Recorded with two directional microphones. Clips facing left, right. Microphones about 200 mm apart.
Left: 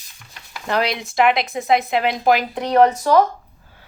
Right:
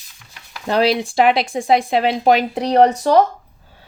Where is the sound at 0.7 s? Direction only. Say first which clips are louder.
Right 5 dB; 30° right (ahead or behind).